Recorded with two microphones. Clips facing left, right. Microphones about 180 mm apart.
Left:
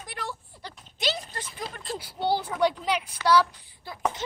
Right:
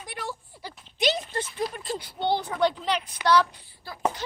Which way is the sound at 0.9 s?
20° right (ahead or behind).